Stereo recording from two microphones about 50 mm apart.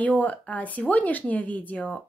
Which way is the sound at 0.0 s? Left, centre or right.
Left.